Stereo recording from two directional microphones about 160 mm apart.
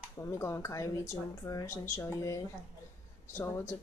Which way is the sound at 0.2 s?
20° left (ahead or behind).